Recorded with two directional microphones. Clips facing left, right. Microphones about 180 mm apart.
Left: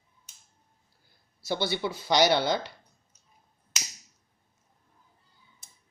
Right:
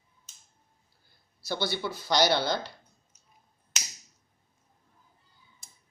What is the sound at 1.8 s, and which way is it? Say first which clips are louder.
Speech: left 2 dB; 15° left (ahead or behind).